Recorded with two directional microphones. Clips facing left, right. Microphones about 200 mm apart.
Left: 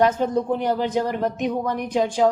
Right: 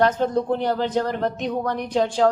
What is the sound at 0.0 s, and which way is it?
A woman's voice, 10° left (ahead or behind).